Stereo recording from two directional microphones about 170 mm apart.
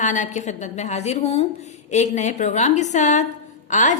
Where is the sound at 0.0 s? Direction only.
45° left (ahead or behind).